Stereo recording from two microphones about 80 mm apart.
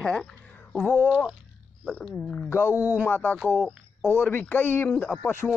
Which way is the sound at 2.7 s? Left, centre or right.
Right.